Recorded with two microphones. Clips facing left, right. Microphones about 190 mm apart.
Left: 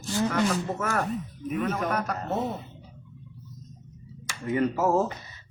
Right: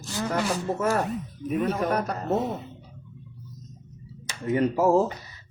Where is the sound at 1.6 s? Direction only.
30° right (ahead or behind).